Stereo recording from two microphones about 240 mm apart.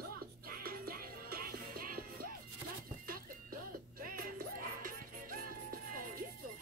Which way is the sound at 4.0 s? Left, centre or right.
Right.